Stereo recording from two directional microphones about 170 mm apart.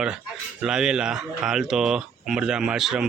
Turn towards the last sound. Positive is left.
turn(degrees=-5)  # may be behind; listen again after turning